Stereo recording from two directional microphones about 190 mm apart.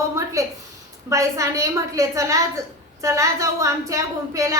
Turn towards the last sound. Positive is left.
turn(degrees=-15)  # may be behind; listen again after turning